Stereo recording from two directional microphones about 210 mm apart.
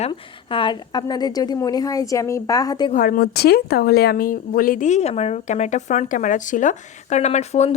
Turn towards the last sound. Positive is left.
turn(degrees=30)  # may be behind; listen again after turning